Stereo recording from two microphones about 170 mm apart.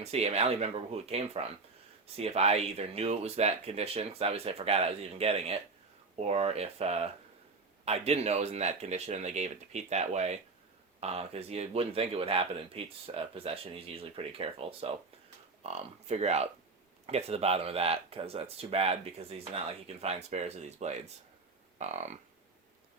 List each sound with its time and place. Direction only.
0.0 s speech: 40° right (ahead or behind)